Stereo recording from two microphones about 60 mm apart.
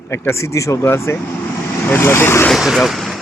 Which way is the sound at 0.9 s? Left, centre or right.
Left.